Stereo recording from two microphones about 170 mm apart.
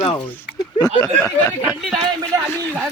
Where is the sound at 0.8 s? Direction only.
15° left (ahead or behind).